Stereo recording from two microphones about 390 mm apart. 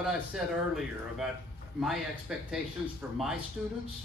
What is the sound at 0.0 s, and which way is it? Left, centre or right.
Speech, centre.